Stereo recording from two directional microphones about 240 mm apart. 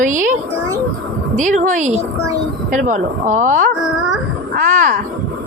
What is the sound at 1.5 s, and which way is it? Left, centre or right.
Speech, right.